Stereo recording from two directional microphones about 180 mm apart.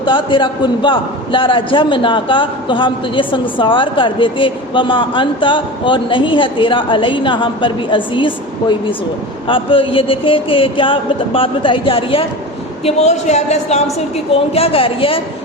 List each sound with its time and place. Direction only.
0.0 s a man's voice: 30° left (ahead or behind)